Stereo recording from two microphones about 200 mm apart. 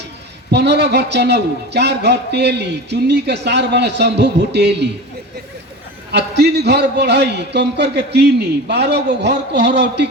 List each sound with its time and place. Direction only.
0.5 s a man's voice: 55° right (ahead or behind)
6.1 s a man's voice: 55° right (ahead or behind)